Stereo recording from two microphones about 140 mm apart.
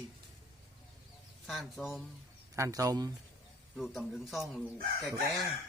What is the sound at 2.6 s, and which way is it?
Speech, 25° right (ahead or behind).